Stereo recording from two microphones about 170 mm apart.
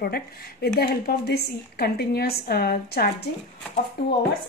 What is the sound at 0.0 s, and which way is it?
A woman's voice, 65° left (ahead or behind).